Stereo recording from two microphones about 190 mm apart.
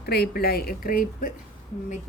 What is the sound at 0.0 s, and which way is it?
Speech, 55° left (ahead or behind).